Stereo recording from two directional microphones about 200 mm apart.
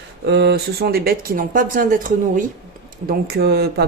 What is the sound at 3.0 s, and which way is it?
Speech, 50° right (ahead or behind).